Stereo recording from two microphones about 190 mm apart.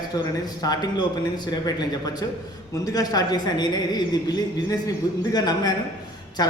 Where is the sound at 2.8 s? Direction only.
20° left (ahead or behind).